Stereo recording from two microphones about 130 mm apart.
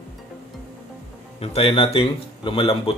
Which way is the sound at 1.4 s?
50° left (ahead or behind).